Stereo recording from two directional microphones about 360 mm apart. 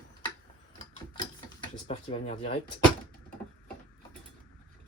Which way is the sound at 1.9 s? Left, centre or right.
Centre.